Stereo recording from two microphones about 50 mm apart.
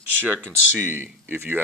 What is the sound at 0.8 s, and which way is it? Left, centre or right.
Speech, right.